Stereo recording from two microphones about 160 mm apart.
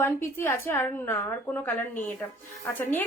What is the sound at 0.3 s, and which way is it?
A woman's voice, 15° left (ahead or behind).